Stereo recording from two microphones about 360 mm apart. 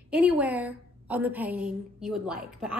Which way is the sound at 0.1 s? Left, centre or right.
Centre.